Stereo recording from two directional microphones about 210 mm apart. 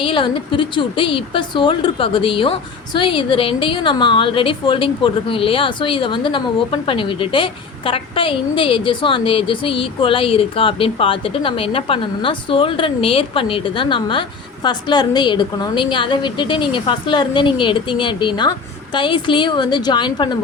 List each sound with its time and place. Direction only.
0.0 s a woman's voice: 25° left (ahead or behind)